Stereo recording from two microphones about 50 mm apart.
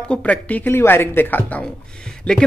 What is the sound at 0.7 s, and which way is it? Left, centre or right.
Speech, left.